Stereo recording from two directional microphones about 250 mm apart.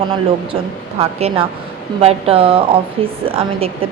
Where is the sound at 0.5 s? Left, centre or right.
Right.